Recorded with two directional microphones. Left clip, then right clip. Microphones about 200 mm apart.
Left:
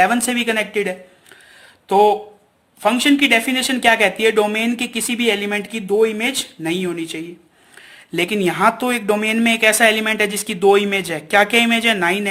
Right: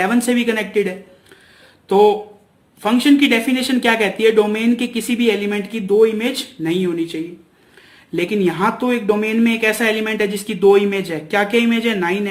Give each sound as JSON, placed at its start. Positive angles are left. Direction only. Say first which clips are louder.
{"t": 0.0, "sound": "speech", "louder": "left 1 dB", "side_deg": 25}